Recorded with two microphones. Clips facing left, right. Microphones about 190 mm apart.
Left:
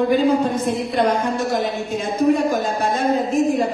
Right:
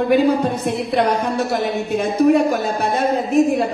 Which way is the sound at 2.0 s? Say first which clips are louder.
Right 3 dB; 65° right (ahead or behind).